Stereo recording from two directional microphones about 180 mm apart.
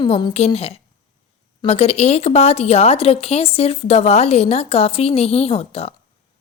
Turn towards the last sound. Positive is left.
turn(degrees=35)  # may be behind; listen again after turning